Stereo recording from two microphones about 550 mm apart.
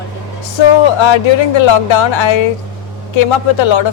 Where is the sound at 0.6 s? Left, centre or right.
Left.